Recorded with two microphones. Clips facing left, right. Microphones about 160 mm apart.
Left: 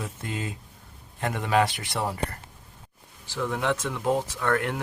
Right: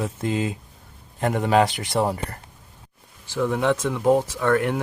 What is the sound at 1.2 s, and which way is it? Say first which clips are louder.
Speech: right 5 dB; 40° right (ahead or behind).